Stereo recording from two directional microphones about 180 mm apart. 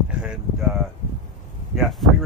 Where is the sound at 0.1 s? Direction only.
5° right (ahead or behind).